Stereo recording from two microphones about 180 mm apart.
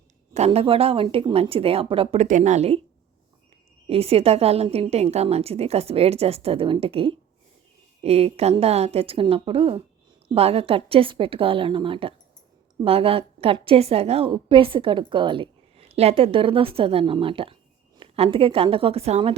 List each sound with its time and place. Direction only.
0.3 s a woman's voice: 35° right (ahead or behind)
3.8 s a woman's voice: 35° right (ahead or behind)